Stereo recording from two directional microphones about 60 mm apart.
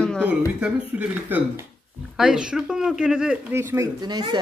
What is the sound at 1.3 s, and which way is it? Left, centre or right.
Speech, right.